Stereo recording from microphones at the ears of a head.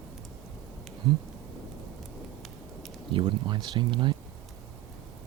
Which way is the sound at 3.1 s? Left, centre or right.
Right.